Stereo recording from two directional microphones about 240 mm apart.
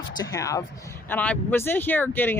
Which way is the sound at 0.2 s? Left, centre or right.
Centre.